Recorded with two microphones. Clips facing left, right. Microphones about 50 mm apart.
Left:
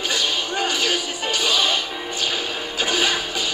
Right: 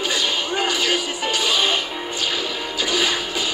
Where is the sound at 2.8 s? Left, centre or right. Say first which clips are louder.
Even; left.